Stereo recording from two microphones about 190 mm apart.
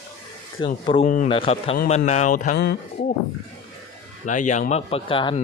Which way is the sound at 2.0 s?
40° left (ahead or behind).